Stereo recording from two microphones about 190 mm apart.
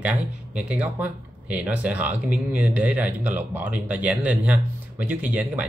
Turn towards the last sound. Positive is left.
turn(degrees=-5)  # may be behind; listen again after turning